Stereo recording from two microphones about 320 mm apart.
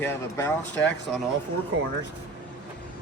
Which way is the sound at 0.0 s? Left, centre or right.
Centre.